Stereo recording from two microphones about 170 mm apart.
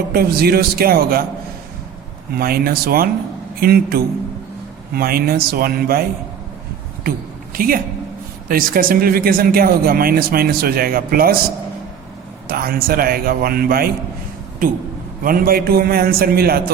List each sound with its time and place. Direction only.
0.1 s speech: 65° right (ahead or behind)
2.3 s speech: 60° right (ahead or behind)
7.5 s a woman's voice: 55° right (ahead or behind)
12.5 s speech: 60° right (ahead or behind)
15.2 s speech: 60° right (ahead or behind)